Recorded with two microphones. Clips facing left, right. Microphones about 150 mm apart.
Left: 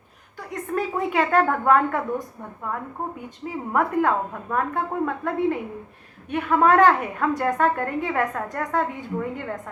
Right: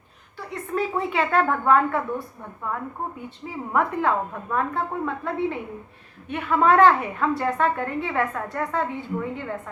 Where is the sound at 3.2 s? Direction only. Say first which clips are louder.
Left 2 dB; 40° left (ahead or behind).